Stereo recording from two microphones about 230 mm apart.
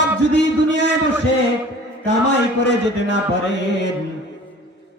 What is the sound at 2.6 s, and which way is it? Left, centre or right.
Speech, left.